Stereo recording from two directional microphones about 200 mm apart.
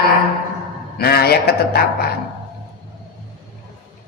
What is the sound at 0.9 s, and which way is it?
A man's voice, 50° left (ahead or behind).